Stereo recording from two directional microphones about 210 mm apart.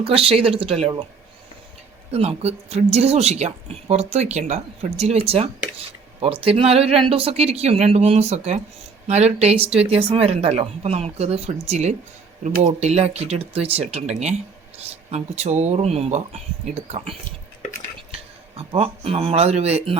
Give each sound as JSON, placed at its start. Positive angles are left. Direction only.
{"t": 0.0, "sound": "a woman's voice", "side_deg": -25}
{"t": 2.1, "sound": "a woman's voice", "side_deg": -30}
{"t": 18.5, "sound": "a woman's voice", "side_deg": -25}